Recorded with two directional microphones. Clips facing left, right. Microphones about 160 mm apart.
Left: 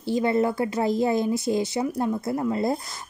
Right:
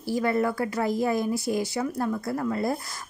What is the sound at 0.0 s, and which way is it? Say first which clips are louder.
Speech: left 2 dB; 25° left (ahead or behind).